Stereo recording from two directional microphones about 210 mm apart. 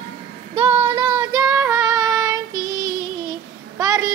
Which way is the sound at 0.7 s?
20° right (ahead or behind).